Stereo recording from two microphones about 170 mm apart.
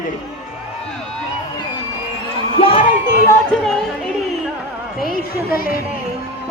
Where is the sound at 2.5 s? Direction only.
35° left (ahead or behind).